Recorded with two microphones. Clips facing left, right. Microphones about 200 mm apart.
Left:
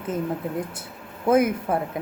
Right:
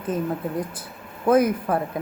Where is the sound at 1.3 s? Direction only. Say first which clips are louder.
Right 1 dB; 25° left (ahead or behind).